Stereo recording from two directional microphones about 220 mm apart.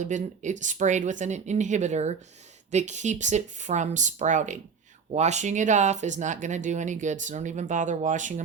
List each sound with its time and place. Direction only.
0.0 s speech: 35° right (ahead or behind)